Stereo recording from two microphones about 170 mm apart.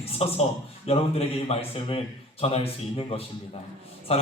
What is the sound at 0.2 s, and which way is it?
A man's voice, 35° left (ahead or behind).